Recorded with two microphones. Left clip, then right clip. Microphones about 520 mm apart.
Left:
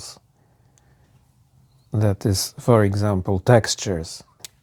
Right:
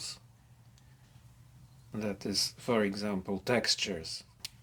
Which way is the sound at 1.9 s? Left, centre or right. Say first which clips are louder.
Left 11 dB; left.